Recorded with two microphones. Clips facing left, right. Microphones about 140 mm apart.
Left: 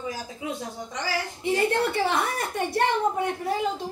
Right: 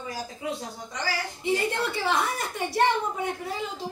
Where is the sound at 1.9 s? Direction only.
60° left (ahead or behind).